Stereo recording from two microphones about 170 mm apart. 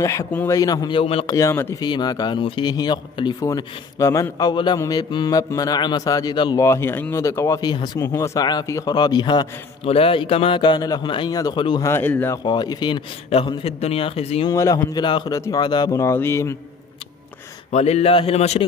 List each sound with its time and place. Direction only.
0.0 s a man's voice: 15° left (ahead or behind); by 1.3 s 35° left (ahead or behind)
1.3 s speech: 15° left (ahead or behind)
1.9 s a man's voice: 25° left (ahead or behind)
11.9 s speech: 10° left (ahead or behind)
12.4 s a man's voice: 25° left (ahead or behind)
14.5 s a man's voice: 20° left (ahead or behind)
17.6 s a man's voice: 40° left (ahead or behind)